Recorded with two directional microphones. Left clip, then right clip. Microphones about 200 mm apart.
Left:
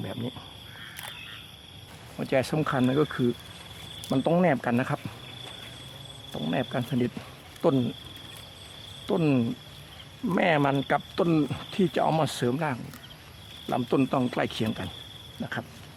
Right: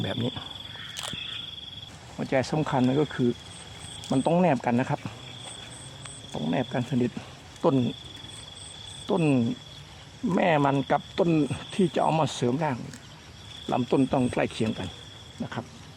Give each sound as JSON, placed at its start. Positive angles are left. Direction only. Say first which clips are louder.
{"t": 0.0, "sound": "speech", "louder": "right 5 dB", "side_deg": -25}
{"t": 2.1, "sound": "speech", "louder": "even", "side_deg": 0}
{"t": 6.3, "sound": "speech", "louder": "right 1 dB", "side_deg": -10}
{"t": 9.0, "sound": "speech", "louder": "right 1 dB", "side_deg": -5}